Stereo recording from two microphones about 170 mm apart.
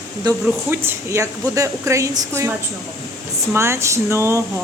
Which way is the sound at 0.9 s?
20° right (ahead or behind).